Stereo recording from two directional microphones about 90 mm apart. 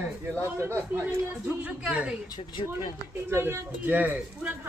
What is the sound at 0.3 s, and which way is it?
Speech, 30° right (ahead or behind).